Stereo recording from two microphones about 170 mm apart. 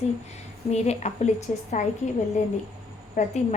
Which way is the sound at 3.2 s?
45° left (ahead or behind).